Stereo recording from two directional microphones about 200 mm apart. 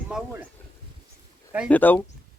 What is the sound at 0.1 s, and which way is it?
Speech, 5° right (ahead or behind).